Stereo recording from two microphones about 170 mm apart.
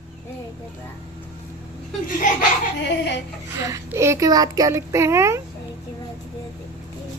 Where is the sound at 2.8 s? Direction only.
90° left.